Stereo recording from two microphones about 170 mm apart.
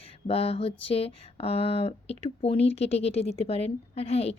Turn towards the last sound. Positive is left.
turn(degrees=35)  # may be behind; listen again after turning